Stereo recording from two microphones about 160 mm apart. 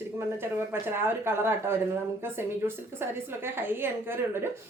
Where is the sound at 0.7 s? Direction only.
15° right (ahead or behind).